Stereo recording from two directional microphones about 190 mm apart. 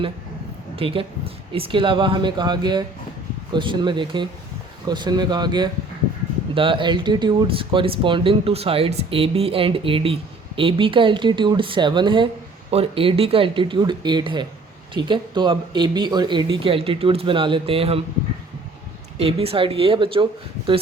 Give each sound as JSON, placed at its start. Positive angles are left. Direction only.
{"t": 0.8, "sound": "speech", "side_deg": -30}
{"t": 19.1, "sound": "speech", "side_deg": -30}